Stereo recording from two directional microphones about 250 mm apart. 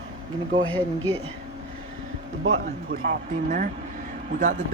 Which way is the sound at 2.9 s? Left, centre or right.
Right.